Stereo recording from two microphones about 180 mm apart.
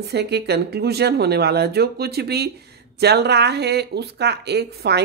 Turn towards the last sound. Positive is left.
turn(degrees=-65)  # may be behind; listen again after turning